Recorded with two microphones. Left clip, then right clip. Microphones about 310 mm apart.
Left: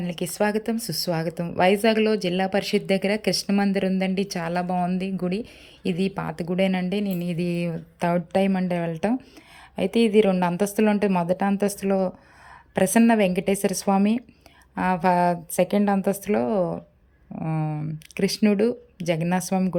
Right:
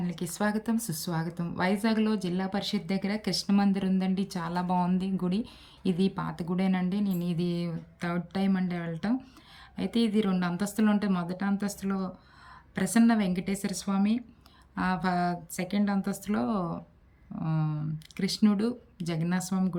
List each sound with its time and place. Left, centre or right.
0.0 s a woman's voice: centre
7.1 s mantra: left
7.3 s a woman's voice: centre